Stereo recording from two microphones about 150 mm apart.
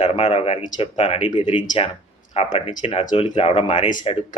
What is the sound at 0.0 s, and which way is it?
Speech, 40° left (ahead or behind).